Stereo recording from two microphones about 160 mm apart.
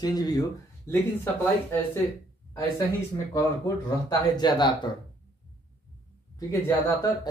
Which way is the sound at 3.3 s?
25° left (ahead or behind).